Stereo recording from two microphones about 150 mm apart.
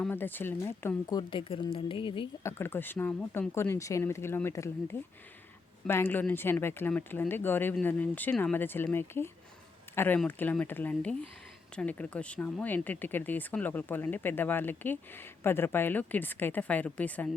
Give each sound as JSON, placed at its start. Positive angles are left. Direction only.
{"t": 0.0, "sound": "speech", "side_deg": 15}
{"t": 1.1, "sound": "speech", "side_deg": 35}
{"t": 2.4, "sound": "speech", "side_deg": 15}